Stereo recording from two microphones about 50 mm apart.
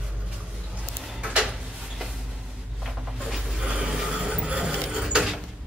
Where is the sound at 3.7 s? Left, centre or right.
Centre.